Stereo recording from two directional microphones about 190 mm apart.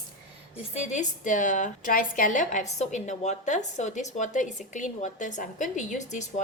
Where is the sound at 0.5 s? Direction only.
35° left (ahead or behind).